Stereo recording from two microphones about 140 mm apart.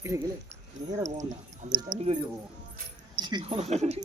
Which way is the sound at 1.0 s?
60° right (ahead or behind).